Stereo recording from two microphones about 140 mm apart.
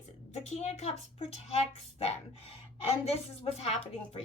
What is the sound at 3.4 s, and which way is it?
Speech, 45° left (ahead or behind).